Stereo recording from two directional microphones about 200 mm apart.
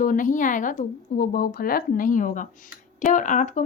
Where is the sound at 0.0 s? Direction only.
40° left (ahead or behind).